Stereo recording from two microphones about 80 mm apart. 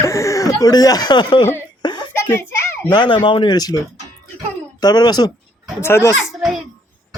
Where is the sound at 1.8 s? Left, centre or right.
Left.